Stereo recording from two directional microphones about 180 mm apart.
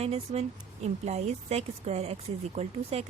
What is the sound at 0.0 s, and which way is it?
A woman's voice, 35° right (ahead or behind).